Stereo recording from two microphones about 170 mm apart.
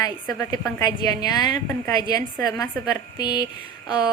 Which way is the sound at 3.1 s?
25° left (ahead or behind).